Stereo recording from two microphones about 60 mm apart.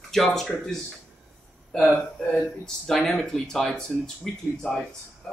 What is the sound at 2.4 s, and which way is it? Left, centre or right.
Speech, centre.